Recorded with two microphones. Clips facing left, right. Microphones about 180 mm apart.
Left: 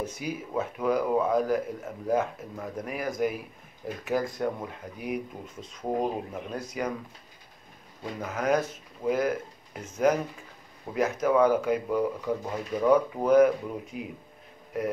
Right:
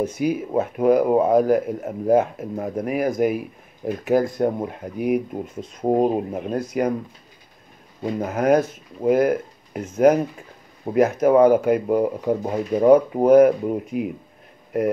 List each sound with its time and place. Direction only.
0.0 s a man's voice: 60° right (ahead or behind); by 4.6 s 40° right (ahead or behind)
4.6 s speech: 55° right (ahead or behind)
8.0 s a man's voice: 55° right (ahead or behind)